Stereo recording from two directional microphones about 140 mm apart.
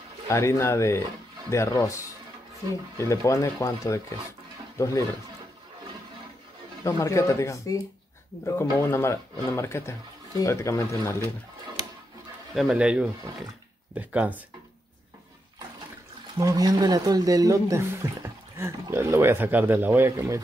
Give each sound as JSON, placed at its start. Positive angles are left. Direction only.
{"t": 0.3, "sound": "speech", "side_deg": 20}
{"t": 6.8, "sound": "speech", "side_deg": 20}
{"t": 12.5, "sound": "speech", "side_deg": -5}
{"t": 16.3, "sound": "speech", "side_deg": -25}